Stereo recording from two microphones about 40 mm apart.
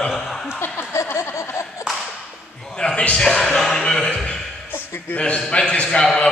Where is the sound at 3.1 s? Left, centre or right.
Centre.